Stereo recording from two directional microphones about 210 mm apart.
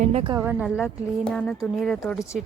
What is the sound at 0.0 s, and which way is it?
Speech, 30° right (ahead or behind).